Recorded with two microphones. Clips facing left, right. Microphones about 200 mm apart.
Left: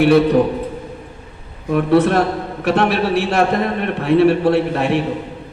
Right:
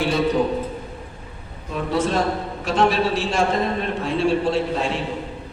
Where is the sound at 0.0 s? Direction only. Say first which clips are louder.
Left 9 dB; 65° left (ahead or behind).